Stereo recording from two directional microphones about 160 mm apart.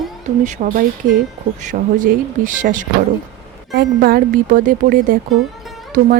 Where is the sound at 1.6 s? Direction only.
55° right (ahead or behind).